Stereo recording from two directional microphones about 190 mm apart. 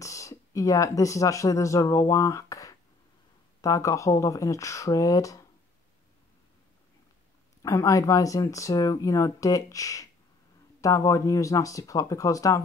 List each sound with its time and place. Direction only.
0.0 s speech: 15° left (ahead or behind)
7.6 s speech: 15° left (ahead or behind)